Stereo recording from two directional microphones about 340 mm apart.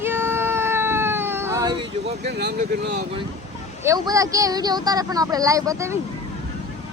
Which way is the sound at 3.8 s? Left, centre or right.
Centre.